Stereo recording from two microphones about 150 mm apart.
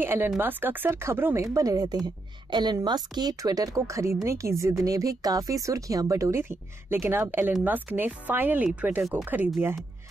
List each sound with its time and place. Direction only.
0.0 s speech: 15° right (ahead or behind)